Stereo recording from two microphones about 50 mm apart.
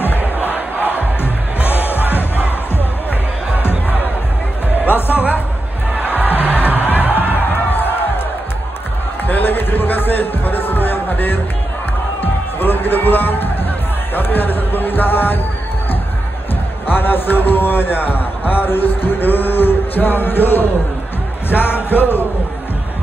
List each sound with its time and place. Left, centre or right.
0.0 s crowd: left
1.7 s music: left
4.8 s music: left
6.5 s music: left
7.5 s crowd: left
9.3 s music: left
12.5 s music: left
16.8 s a sound: left
21.5 s music: left